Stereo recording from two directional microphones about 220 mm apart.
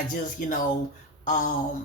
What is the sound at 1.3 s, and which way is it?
Speech, 35° left (ahead or behind).